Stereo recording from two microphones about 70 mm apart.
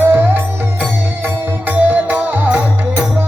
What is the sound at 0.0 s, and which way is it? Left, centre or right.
Music, right.